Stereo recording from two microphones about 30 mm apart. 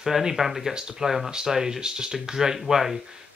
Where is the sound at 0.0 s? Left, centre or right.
Centre.